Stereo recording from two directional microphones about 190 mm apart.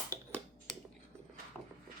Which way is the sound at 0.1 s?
20° right (ahead or behind).